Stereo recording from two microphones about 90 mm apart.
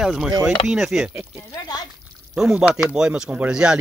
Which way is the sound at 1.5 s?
50° left (ahead or behind).